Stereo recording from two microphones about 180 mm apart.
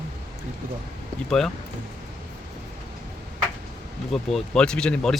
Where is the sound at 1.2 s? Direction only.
Centre (ahead or behind).